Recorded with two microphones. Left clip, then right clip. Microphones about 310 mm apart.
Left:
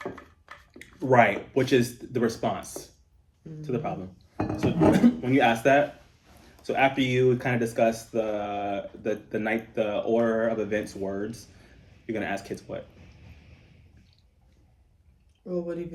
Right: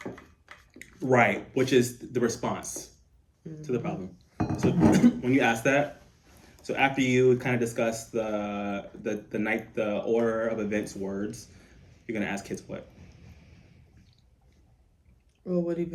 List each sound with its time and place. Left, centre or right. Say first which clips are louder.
0.0 s speech: left 3 dB; centre
15.4 s speech: right 2 dB; right